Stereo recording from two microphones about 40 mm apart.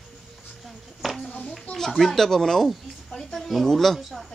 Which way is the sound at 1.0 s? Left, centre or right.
Centre.